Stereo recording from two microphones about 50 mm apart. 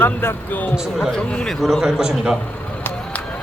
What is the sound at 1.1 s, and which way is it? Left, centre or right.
Speech, centre.